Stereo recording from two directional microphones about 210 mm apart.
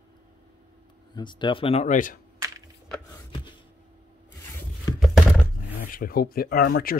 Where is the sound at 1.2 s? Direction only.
20° left (ahead or behind); by 2.2 s 40° left (ahead or behind).